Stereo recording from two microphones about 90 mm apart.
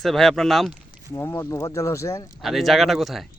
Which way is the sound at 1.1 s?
25° left (ahead or behind).